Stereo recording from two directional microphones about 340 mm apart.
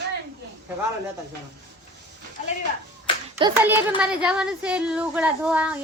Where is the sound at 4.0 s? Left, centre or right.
Centre.